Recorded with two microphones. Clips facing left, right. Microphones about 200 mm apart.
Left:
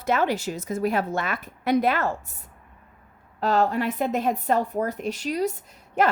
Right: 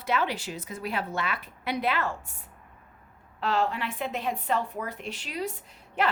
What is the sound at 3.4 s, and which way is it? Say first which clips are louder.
A woman's voice: left 6 dB; 40° left (ahead or behind).